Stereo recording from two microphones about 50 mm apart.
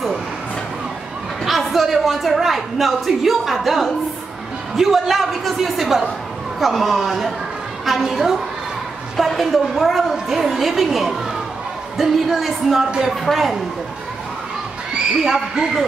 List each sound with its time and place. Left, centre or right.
1.4 s speech: centre
15.1 s a man's voice: centre